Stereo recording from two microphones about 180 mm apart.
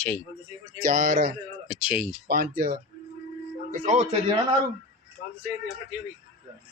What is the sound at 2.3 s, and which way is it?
Speech, 55° right (ahead or behind).